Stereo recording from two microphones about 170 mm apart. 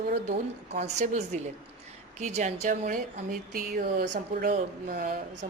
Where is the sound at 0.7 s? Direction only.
40° right (ahead or behind).